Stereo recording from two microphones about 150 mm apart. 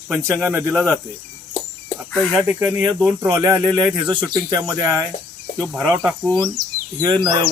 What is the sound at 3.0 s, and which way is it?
Speech, 15° right (ahead or behind).